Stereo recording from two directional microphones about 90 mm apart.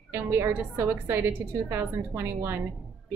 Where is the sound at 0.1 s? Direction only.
25° right (ahead or behind).